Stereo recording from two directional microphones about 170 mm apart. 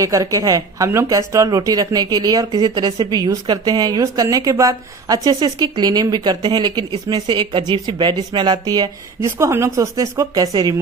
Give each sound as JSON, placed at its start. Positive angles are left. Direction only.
{"t": 0.0, "sound": "a woman's voice", "side_deg": -20}